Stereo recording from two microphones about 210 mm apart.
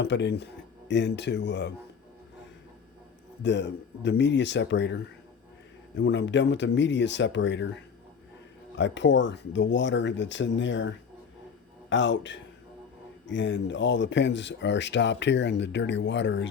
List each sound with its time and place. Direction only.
0.0 s speech: 55° left (ahead or behind)
3.4 s speech: 55° left (ahead or behind)
6.0 s speech: 55° left (ahead or behind)
8.7 s speech: 60° left (ahead or behind)